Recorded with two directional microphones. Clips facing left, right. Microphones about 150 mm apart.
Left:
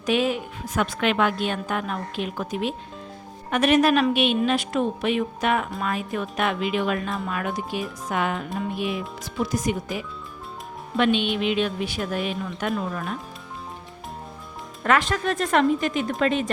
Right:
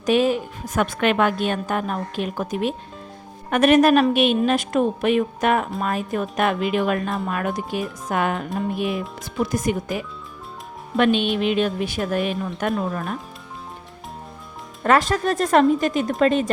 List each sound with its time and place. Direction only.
0.0 s a woman's voice: 40° right (ahead or behind)
9.5 s a woman's voice: 50° right (ahead or behind)
14.8 s speech: 40° right (ahead or behind)